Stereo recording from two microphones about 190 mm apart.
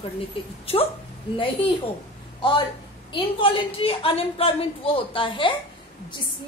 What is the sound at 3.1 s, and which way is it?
A woman's voice, 25° left (ahead or behind).